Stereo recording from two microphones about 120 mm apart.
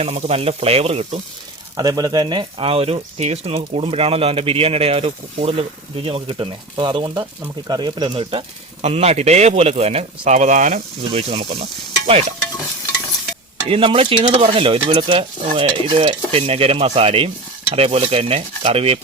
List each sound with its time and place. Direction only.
0.0 s speech: 60° right (ahead or behind)
1.7 s speech: 30° right (ahead or behind); by 8.4 s 50° right (ahead or behind)
8.8 s speech: 65° right (ahead or behind)
13.7 s speech: 50° right (ahead or behind)